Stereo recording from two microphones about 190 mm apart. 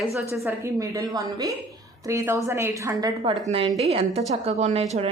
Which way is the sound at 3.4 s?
30° right (ahead or behind).